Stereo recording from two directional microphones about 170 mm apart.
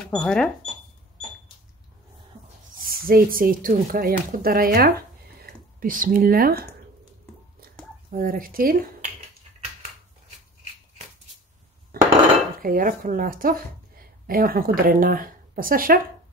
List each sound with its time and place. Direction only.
0.0 s speech: 5° left (ahead or behind)
2.8 s speech: 60° right (ahead or behind)
8.1 s speech: 55° right (ahead or behind)
11.9 s dishes: 65° right (ahead or behind)
12.6 s speech: 55° right (ahead or behind)